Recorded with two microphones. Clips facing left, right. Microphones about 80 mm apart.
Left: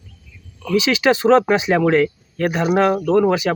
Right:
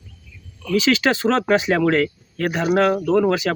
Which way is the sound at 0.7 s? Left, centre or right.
Centre.